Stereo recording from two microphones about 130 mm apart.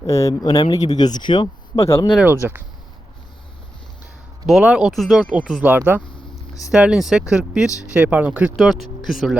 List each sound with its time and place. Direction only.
0.0 s speech: 25° left (ahead or behind)
1.8 s speech: 25° left (ahead or behind)
2.2 s speech: 15° right (ahead or behind)
4.4 s speech: 5° right (ahead or behind)
5.6 s speech: 15° right (ahead or behind)